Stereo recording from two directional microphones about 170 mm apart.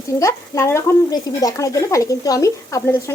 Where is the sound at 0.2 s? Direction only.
15° left (ahead or behind).